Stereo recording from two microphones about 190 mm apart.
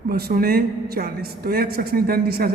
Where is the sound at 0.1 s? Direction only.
55° right (ahead or behind).